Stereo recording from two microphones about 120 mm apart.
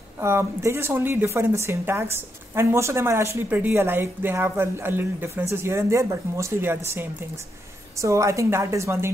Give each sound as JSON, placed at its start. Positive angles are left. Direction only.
{"t": 0.2, "sound": "a woman's voice", "side_deg": -20}